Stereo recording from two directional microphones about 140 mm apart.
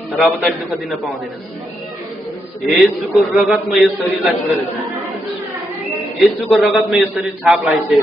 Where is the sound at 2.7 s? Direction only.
10° right (ahead or behind).